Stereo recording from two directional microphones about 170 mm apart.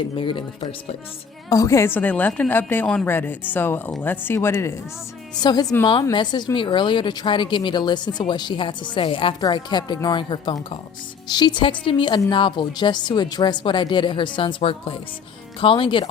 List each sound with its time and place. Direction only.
0.2 s a woman's voice: 30° left (ahead or behind)
1.5 s a woman's voice: 20° left (ahead or behind)